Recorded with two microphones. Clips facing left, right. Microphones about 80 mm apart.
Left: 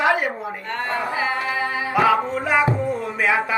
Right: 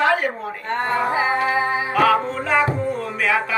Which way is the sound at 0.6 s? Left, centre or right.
Right.